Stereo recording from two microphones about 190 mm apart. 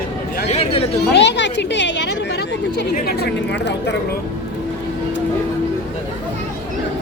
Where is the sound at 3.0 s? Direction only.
60° left (ahead or behind).